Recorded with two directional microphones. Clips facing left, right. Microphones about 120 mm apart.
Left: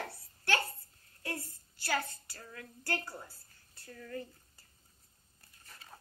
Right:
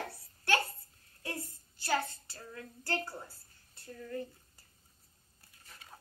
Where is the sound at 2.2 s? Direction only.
25° right (ahead or behind).